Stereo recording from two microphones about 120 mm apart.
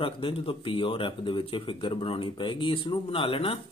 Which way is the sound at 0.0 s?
50° left (ahead or behind).